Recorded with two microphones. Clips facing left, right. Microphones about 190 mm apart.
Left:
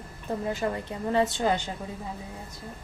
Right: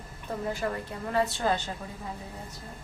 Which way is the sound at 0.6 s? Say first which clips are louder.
Left 3 dB; 25° left (ahead or behind).